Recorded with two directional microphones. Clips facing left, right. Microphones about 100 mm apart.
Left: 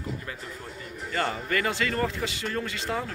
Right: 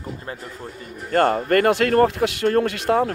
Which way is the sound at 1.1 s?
55° right (ahead or behind).